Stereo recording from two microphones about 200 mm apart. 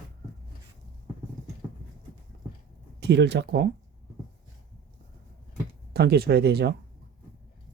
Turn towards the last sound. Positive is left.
turn(degrees=-55)  # may be behind; listen again after turning